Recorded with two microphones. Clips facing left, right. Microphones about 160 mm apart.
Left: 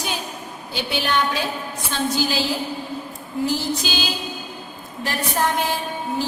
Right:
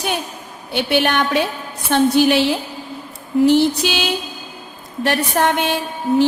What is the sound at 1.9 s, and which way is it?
Music, 65° right (ahead or behind).